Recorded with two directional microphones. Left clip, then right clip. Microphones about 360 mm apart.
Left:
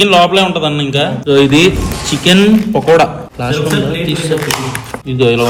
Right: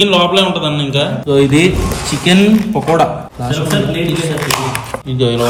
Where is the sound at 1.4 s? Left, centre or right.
Centre.